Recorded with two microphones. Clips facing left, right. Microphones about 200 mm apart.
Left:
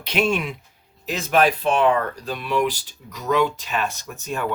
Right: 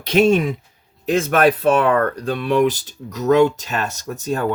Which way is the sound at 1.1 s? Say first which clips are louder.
Right 4 dB; 55° right (ahead or behind).